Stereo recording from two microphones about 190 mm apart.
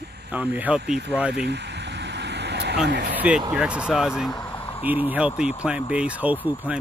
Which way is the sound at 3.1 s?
5° right (ahead or behind).